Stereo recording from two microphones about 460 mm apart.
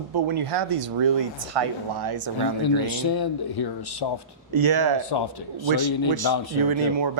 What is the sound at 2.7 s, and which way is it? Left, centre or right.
Speech, left.